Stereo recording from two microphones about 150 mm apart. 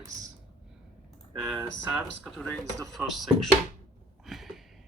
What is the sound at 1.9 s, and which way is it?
Speech, centre (ahead or behind).